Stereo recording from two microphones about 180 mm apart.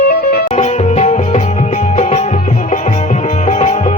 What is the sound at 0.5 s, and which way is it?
Music, 40° left (ahead or behind).